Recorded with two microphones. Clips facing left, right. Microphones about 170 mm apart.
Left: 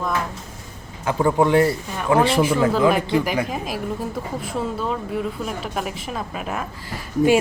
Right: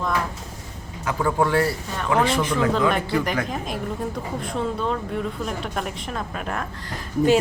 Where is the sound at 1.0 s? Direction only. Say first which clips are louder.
Left 4 dB; 20° left (ahead or behind).